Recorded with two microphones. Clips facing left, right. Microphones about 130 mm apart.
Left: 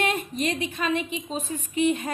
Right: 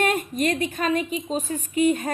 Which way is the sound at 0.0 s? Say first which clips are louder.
Right 3 dB; 50° right (ahead or behind).